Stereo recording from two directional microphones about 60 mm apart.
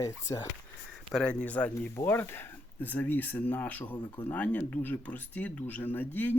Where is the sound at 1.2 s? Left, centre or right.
Left.